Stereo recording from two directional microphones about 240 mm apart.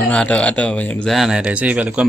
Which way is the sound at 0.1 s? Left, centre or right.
Centre.